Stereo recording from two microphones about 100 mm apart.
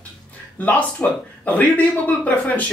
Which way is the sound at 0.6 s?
15° left (ahead or behind).